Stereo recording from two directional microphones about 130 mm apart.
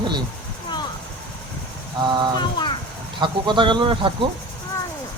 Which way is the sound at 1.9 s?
35° right (ahead or behind).